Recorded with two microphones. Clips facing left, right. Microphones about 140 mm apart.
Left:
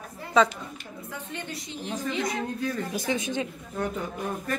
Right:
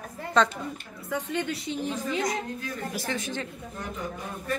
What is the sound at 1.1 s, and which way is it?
Speech, 75° right (ahead or behind).